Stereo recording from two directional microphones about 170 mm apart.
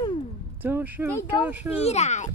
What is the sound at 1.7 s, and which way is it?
Speech, 40° left (ahead or behind).